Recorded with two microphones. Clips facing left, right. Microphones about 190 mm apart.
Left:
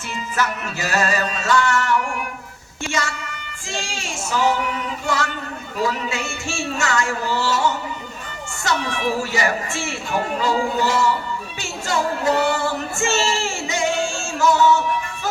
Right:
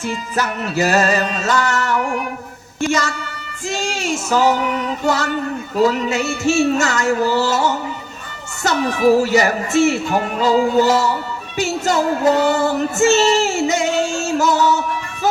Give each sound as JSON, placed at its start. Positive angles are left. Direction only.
{"t": 0.3, "sound": "music", "side_deg": -40}